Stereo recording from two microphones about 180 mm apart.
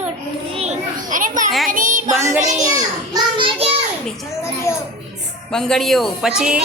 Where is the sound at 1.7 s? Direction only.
50° right (ahead or behind).